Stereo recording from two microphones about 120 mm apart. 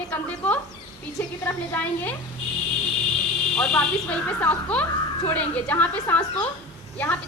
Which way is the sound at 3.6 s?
10° left (ahead or behind).